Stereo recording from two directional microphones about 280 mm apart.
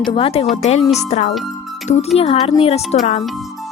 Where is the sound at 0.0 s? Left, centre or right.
Centre.